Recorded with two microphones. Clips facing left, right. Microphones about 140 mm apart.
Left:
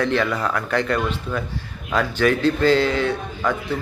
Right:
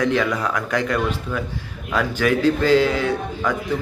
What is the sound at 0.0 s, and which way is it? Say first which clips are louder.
A man's voice: right 1 dB; 10° right (ahead or behind).